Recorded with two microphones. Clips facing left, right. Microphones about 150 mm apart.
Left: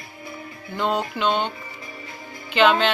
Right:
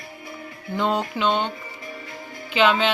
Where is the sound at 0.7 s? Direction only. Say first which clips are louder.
Right 1 dB; centre (ahead or behind).